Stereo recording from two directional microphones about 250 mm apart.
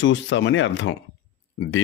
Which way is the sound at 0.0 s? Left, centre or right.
Left.